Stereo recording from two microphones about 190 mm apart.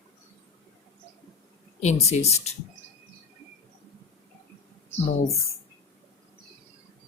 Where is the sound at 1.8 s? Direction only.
35° left (ahead or behind).